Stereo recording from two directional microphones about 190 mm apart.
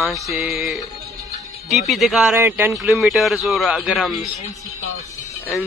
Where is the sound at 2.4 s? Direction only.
10° right (ahead or behind).